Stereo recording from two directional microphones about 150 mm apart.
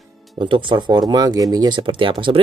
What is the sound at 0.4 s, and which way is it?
Speech, 35° right (ahead or behind).